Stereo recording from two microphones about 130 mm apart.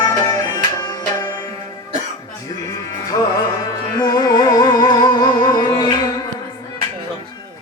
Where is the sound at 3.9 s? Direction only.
30° left (ahead or behind).